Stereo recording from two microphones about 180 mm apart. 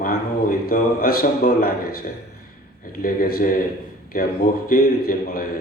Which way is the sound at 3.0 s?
55° left (ahead or behind).